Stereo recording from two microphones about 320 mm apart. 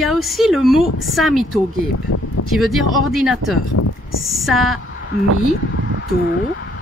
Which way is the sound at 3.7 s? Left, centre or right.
Left.